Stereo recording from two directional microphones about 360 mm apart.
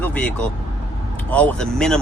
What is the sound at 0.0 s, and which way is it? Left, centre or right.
Speech, centre.